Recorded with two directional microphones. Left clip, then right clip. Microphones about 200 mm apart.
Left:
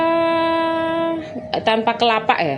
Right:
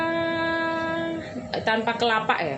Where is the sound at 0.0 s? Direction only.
35° left (ahead or behind).